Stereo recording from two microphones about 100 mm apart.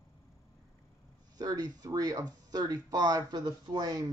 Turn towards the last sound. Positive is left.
turn(degrees=-45)  # may be behind; listen again after turning